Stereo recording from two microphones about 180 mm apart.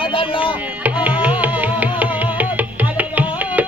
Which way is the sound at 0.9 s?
10° right (ahead or behind).